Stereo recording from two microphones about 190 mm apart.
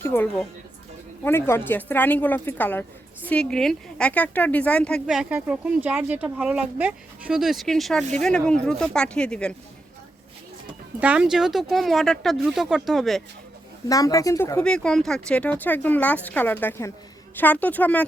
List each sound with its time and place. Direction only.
0.0 s speech: 10° left (ahead or behind)
11.0 s speech: 5° right (ahead or behind)
13.8 s speech: 20° left (ahead or behind)
14.6 s speech: 5° left (ahead or behind)